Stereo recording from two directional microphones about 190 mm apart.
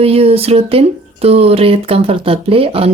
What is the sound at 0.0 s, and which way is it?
Speech, 30° right (ahead or behind).